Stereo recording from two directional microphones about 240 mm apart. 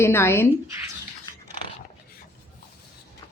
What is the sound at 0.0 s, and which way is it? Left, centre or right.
Speech, centre.